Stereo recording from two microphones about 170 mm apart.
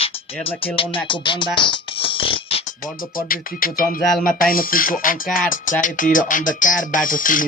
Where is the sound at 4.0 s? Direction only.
Centre (ahead or behind).